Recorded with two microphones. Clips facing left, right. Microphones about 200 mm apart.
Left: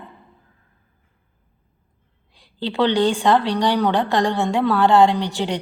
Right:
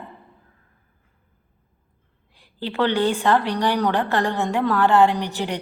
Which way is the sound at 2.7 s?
15° left (ahead or behind).